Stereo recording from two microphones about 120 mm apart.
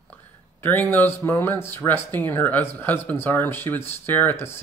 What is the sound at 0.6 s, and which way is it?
Speech, 20° left (ahead or behind).